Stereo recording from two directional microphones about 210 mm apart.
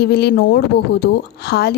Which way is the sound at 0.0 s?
50° left (ahead or behind).